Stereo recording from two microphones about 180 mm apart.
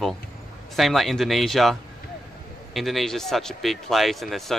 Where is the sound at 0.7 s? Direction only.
Centre (ahead or behind).